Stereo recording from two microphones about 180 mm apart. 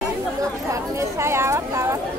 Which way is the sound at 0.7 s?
15° right (ahead or behind).